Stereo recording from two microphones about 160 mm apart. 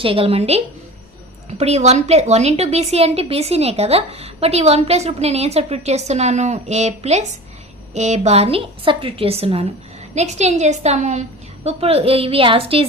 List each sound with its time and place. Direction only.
0.0 s a woman's voice: 35° right (ahead or behind)